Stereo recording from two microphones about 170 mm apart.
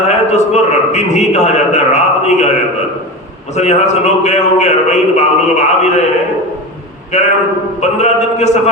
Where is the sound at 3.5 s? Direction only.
40° left (ahead or behind).